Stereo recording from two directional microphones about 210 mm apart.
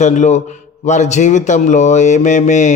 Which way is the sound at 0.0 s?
35° left (ahead or behind).